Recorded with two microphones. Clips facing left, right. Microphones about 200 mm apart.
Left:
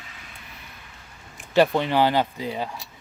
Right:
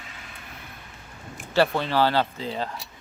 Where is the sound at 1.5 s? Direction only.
15° left (ahead or behind).